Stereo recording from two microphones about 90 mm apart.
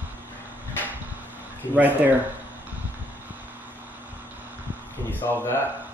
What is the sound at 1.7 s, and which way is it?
Speech, 20° right (ahead or behind).